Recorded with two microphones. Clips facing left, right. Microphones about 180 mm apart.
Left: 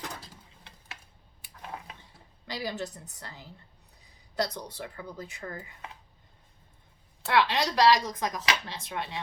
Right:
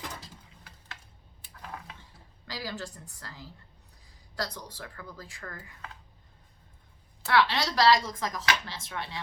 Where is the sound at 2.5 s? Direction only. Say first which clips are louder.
Left 3 dB; 20° left (ahead or behind).